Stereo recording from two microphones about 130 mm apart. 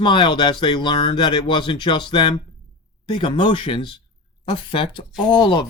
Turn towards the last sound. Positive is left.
turn(degrees=35)  # may be behind; listen again after turning